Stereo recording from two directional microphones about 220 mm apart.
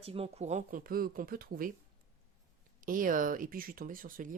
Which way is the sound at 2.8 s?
40° right (ahead or behind).